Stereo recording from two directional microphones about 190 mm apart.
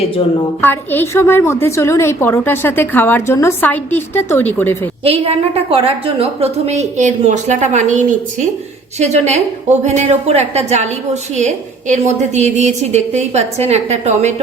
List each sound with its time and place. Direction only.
0.6 s a woman's voice: 10° left (ahead or behind)
5.0 s a woman's voice: 30° right (ahead or behind)